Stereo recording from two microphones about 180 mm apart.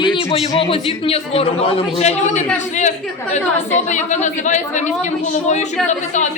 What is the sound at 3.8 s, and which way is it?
A woman's voice, 40° left (ahead or behind).